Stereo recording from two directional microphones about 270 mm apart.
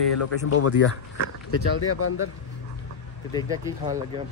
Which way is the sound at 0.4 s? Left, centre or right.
Left.